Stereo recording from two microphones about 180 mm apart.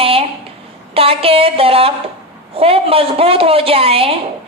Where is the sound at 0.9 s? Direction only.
30° right (ahead or behind).